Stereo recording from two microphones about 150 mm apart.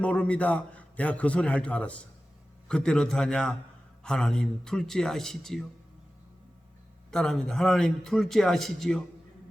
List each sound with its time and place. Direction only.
0.0 s a man's voice: 10° left (ahead or behind)
7.1 s a man's voice: 5° left (ahead or behind)